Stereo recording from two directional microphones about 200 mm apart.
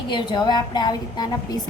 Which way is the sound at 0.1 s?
20° left (ahead or behind).